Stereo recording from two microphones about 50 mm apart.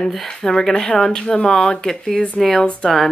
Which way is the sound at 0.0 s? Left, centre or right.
Centre.